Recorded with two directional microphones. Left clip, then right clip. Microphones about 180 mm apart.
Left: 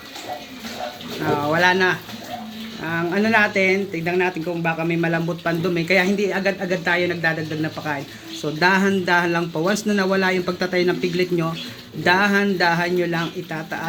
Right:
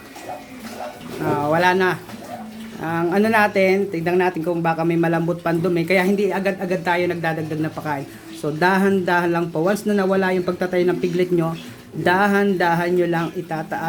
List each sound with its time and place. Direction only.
1.2 s speech: 5° right (ahead or behind)